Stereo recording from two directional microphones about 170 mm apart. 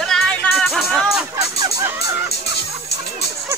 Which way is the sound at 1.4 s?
20° right (ahead or behind).